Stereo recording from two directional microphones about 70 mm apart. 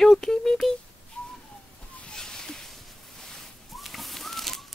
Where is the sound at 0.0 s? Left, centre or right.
Centre.